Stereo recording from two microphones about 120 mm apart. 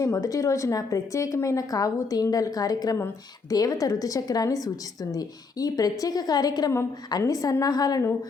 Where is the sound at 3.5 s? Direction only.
30° left (ahead or behind).